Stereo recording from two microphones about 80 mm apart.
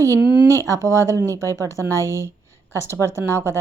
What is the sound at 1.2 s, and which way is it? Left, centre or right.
Speech, left.